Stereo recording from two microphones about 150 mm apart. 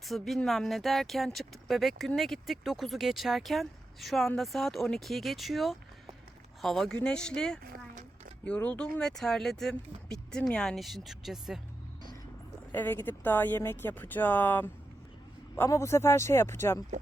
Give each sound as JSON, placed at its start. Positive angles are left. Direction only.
{"t": 0.0, "sound": "speech", "side_deg": 0}
{"t": 7.6, "sound": "a sound", "side_deg": -80}
{"t": 8.4, "sound": "speech", "side_deg": 10}
{"t": 12.7, "sound": "speech", "side_deg": 10}